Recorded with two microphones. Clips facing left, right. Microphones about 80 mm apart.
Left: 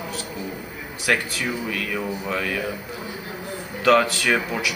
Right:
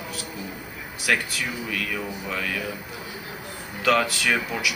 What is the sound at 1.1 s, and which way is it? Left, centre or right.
A man's voice, centre.